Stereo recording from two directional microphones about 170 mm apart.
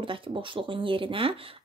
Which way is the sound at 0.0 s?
30° right (ahead or behind).